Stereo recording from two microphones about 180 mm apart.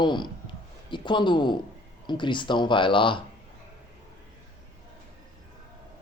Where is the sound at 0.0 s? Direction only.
25° left (ahead or behind).